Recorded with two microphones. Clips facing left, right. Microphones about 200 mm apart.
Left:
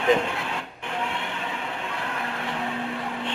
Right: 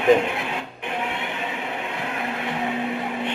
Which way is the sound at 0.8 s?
20° right (ahead or behind).